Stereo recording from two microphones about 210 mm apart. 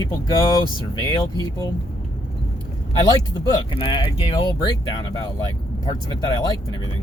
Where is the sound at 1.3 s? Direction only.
20° left (ahead or behind).